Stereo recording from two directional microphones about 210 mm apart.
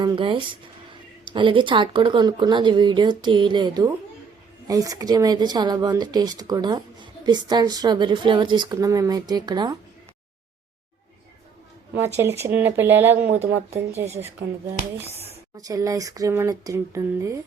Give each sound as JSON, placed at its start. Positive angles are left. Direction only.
{"t": 0.0, "sound": "speech", "side_deg": -20}
{"t": 11.9, "sound": "speech", "side_deg": -10}
{"t": 13.3, "sound": "speech", "side_deg": -30}
{"t": 15.5, "sound": "speech", "side_deg": -15}